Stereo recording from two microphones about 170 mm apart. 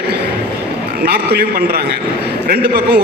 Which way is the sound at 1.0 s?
65° right (ahead or behind).